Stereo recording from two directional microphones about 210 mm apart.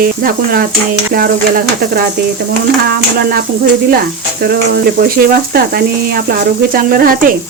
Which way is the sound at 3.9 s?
45° right (ahead or behind).